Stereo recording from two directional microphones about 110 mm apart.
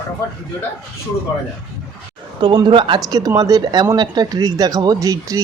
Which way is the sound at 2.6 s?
50° right (ahead or behind).